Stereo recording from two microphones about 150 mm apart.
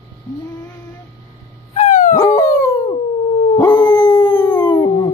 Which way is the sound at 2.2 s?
25° left (ahead or behind).